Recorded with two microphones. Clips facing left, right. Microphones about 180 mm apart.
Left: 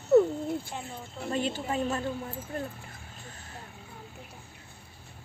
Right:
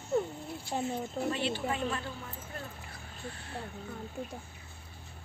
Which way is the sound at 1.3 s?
45° left (ahead or behind).